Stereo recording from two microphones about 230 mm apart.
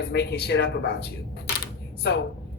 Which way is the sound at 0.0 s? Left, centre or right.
Left.